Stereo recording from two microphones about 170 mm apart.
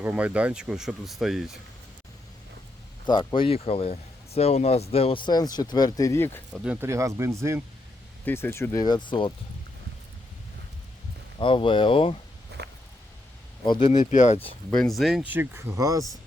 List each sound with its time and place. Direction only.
0.0 s speech: 10° right (ahead or behind)
3.1 s speech: 25° left (ahead or behind)
6.5 s speech: 10° right (ahead or behind)
8.2 s speech: 15° left (ahead or behind)
11.3 s speech: 30° left (ahead or behind)
12.6 s a sound: 80° right
13.9 s speech: 45° left (ahead or behind)
14.7 s speech: centre (ahead or behind); by 16.0 s 20° right (ahead or behind)